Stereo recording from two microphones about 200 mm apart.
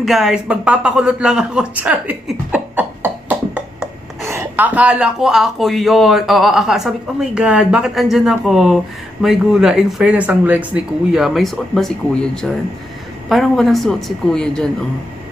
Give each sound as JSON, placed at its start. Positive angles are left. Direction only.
{"t": 0.0, "sound": "speech", "side_deg": 0}